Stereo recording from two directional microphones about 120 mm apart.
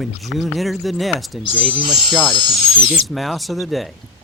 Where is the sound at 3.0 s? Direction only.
Centre (ahead or behind).